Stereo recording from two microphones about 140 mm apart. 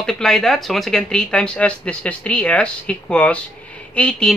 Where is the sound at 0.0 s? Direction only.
5° left (ahead or behind).